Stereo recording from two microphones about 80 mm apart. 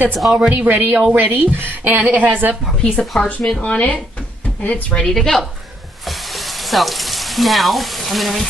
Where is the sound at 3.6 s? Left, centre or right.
Centre.